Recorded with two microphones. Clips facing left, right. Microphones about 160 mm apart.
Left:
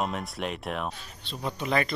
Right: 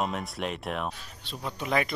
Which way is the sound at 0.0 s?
Centre (ahead or behind).